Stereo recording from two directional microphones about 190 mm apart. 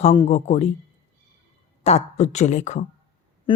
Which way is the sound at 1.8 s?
35° left (ahead or behind).